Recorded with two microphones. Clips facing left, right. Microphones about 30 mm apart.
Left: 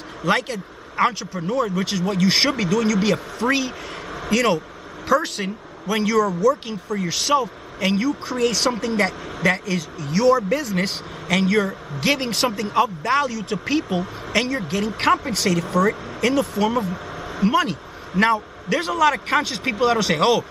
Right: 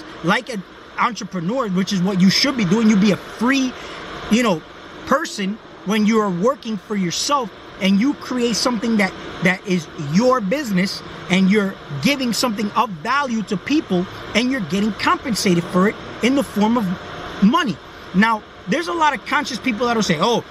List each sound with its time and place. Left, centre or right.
0.2 s speech: centre
10.5 s speech: centre
11.2 s speech: centre
15.6 s speech: centre
16.2 s speech: centre
16.9 s a sound: centre
17.5 s speech: centre